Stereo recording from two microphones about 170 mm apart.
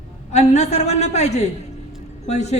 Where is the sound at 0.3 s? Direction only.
40° left (ahead or behind).